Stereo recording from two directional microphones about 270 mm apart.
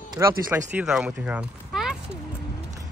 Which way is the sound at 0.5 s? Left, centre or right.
Centre.